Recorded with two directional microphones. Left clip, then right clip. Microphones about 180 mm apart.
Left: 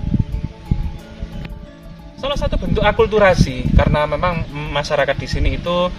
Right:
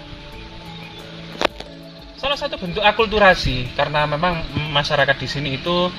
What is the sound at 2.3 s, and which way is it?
Speech, 20° left (ahead or behind).